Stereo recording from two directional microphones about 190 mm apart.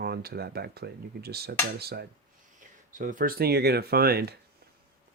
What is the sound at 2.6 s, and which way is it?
Speech, 45° right (ahead or behind).